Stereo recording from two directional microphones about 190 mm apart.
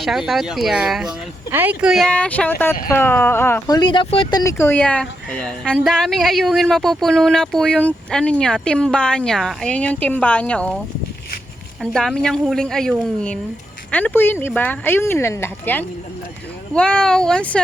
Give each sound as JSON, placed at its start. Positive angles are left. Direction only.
{"t": 0.0, "sound": "speech", "side_deg": 0}
{"t": 11.8, "sound": "speech", "side_deg": 5}